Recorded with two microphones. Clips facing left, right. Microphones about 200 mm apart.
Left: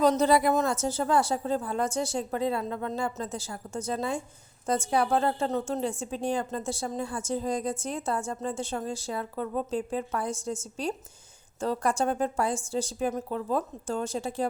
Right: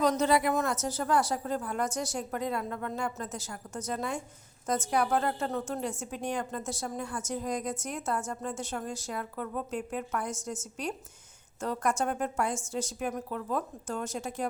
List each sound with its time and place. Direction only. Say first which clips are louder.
0.0 s a woman's voice: left 4 dB; 30° left (ahead or behind)